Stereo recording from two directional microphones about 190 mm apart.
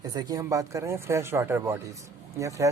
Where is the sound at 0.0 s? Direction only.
20° right (ahead or behind).